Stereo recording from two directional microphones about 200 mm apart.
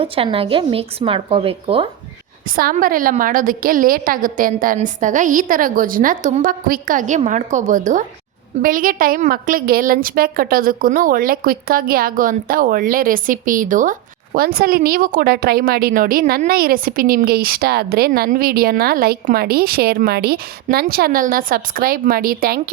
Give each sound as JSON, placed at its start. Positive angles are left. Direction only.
{"t": 0.0, "sound": "speech", "side_deg": -30}
{"t": 2.6, "sound": "a woman's voice", "side_deg": -45}